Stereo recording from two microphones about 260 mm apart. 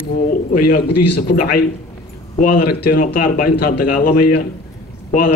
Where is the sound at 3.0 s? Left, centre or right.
Left.